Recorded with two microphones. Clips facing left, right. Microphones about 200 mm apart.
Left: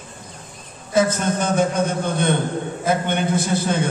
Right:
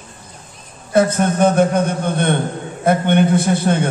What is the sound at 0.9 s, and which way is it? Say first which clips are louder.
A man's voice: right 4 dB; 60° right (ahead or behind).